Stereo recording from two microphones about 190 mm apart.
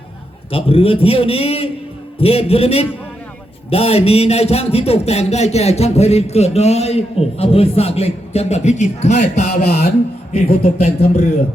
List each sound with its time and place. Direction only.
0.5 s a man's voice: 30° left (ahead or behind)
10.6 s a man's voice: 40° left (ahead or behind)